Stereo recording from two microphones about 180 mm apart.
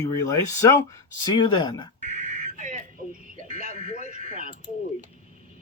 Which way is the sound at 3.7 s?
40° left (ahead or behind).